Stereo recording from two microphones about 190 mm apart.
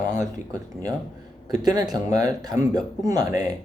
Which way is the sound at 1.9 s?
20° right (ahead or behind).